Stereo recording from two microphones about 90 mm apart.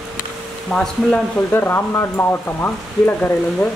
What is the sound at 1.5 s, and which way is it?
Speech, 25° left (ahead or behind).